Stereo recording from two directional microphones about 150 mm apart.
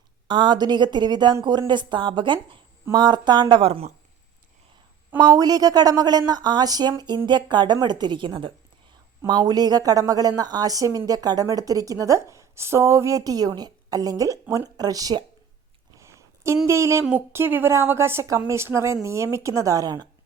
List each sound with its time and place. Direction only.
0.3 s a woman's voice: 30° right (ahead or behind)
5.2 s a woman's voice: 25° right (ahead or behind)
16.0 s a sound: 20° right (ahead or behind)
16.6 s a woman's voice: 20° right (ahead or behind)